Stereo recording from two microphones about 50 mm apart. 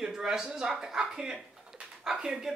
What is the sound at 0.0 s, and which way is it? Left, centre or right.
Speech, centre.